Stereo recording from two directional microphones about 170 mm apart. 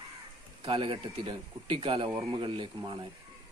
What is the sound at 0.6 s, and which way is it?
Speech, 30° right (ahead or behind).